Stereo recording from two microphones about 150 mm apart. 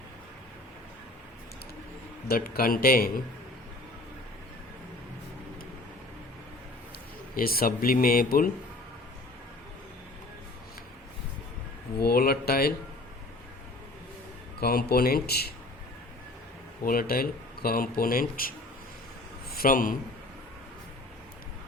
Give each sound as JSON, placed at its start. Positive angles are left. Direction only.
{"t": 2.2, "sound": "speech", "side_deg": 85}
{"t": 7.3, "sound": "speech", "side_deg": 80}
{"t": 11.9, "sound": "speech", "side_deg": 90}
{"t": 14.6, "sound": "a man's voice", "side_deg": 90}
{"t": 16.8, "sound": "a man's voice", "side_deg": 75}